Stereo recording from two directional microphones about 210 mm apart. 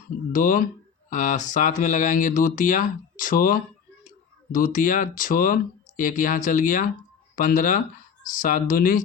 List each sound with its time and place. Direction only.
0.3 s speech: 40° left (ahead or behind)